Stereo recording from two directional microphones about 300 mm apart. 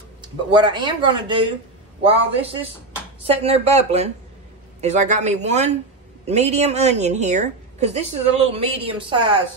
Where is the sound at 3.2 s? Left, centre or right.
Right.